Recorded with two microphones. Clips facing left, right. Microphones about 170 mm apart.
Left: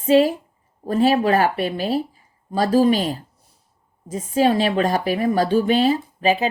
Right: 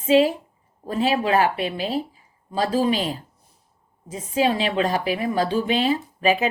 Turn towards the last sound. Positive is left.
turn(degrees=35)  # may be behind; listen again after turning